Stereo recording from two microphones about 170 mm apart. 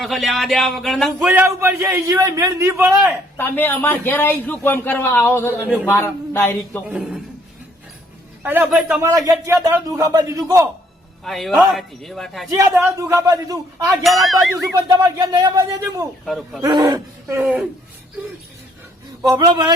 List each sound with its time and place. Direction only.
0.0 s a man's voice: centre (ahead or behind)
1.2 s a man's voice: 10° right (ahead or behind)
3.3 s a man's voice: 10° left (ahead or behind)
6.8 s a man's voice: 5° right (ahead or behind)
8.4 s a man's voice: 10° right (ahead or behind)
11.2 s a man's voice: centre (ahead or behind)
13.0 s a man's voice: 20° right (ahead or behind)
14.0 s a man's voice: centre (ahead or behind)
14.8 s a man's voice: 20° right (ahead or behind)
16.2 s a man's voice: centre (ahead or behind)
16.6 s a man's voice: 20° right (ahead or behind)
17.4 s a man's voice: centre (ahead or behind)
19.2 s a man's voice: 25° right (ahead or behind)